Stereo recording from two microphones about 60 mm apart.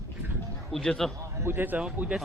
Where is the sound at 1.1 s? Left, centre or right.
Right.